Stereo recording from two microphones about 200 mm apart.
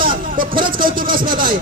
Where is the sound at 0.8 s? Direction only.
45° right (ahead or behind).